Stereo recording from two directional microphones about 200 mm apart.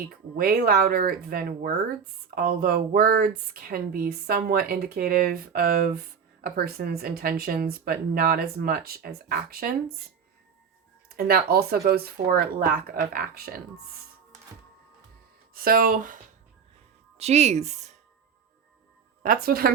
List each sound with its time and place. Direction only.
0.3 s speech: 45° right (ahead or behind)
11.2 s speech: 50° right (ahead or behind)
15.5 s speech: 45° right (ahead or behind)
17.2 s speech: 35° right (ahead or behind)
19.2 s speech: 45° right (ahead or behind)